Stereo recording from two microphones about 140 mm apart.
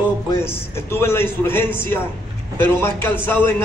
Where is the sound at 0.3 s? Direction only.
15° left (ahead or behind).